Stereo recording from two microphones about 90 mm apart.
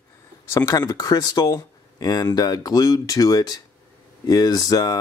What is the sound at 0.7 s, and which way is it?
Speech, 45° left (ahead or behind).